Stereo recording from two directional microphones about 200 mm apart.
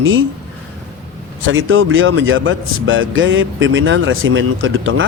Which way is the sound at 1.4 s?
80° right.